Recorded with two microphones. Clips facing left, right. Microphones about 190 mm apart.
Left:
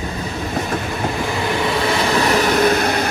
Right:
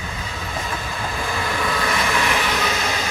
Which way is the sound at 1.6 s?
25° left (ahead or behind).